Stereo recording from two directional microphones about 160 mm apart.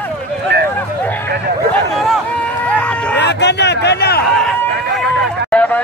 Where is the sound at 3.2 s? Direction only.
90° left.